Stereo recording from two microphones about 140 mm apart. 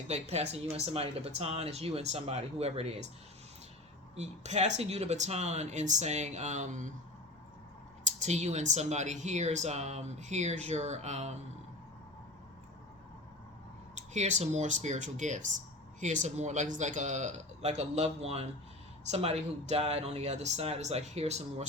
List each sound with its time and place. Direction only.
0.1 s speech: 50° right (ahead or behind)
4.1 s speech: 50° right (ahead or behind)
8.0 s speech: 55° right (ahead or behind)
13.9 s speech: 55° right (ahead or behind)